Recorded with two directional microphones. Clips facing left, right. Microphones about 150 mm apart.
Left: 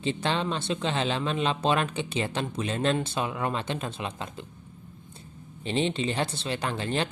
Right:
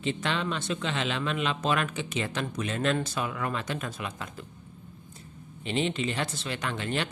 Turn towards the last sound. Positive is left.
turn(degrees=30)  # may be behind; listen again after turning